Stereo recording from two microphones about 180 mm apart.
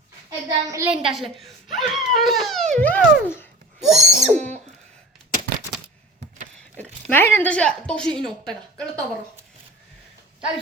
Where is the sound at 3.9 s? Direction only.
Centre (ahead or behind).